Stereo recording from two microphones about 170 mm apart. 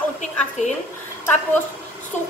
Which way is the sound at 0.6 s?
45° left (ahead or behind).